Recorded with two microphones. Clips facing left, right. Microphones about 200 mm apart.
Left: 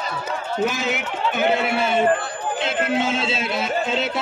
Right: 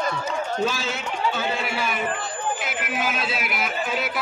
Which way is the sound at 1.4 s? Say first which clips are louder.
Left 7 dB; 65° left (ahead or behind).